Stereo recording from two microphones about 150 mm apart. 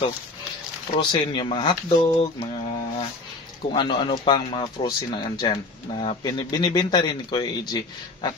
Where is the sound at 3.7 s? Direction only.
35° left (ahead or behind).